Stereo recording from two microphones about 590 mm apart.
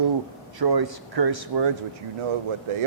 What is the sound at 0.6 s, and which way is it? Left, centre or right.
Speech, right.